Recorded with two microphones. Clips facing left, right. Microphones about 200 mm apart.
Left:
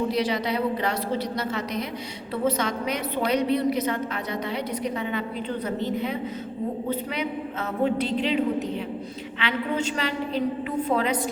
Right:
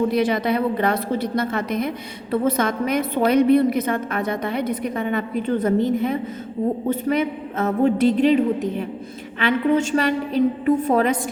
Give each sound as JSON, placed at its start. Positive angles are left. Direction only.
{"t": 0.1, "sound": "a woman's voice", "side_deg": -55}
{"t": 9.4, "sound": "a woman's voice", "side_deg": -45}